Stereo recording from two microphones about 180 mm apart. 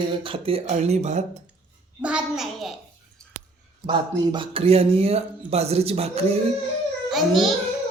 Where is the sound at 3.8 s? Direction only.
25° right (ahead or behind).